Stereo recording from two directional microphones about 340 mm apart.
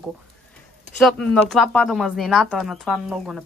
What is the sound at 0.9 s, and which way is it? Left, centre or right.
Speech, centre.